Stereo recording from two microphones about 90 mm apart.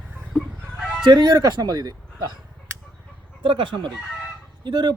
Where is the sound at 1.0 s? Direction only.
50° right (ahead or behind).